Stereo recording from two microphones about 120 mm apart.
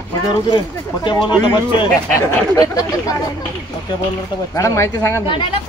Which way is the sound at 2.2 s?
30° left (ahead or behind).